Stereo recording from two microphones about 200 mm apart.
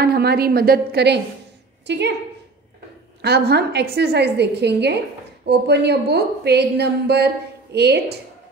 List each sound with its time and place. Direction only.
0.0 s a woman's voice: 50° right (ahead or behind)
3.2 s a woman's voice: 55° right (ahead or behind)